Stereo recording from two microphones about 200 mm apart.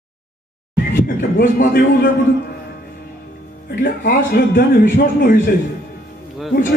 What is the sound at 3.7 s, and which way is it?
A man's voice, 45° left (ahead or behind).